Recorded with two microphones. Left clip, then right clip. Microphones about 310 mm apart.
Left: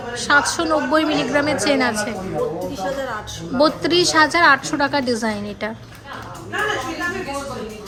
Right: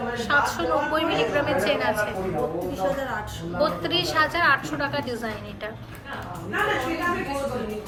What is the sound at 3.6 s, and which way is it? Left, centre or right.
A woman's voice, centre.